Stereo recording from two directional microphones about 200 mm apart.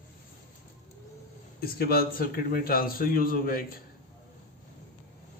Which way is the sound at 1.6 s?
50° left (ahead or behind).